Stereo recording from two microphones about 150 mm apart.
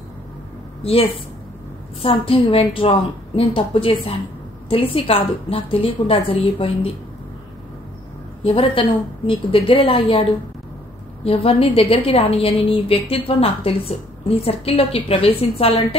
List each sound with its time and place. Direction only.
0.8 s a woman's voice: 40° left (ahead or behind)
8.5 s a woman's voice: 35° left (ahead or behind)
11.2 s a woman's voice: 40° left (ahead or behind)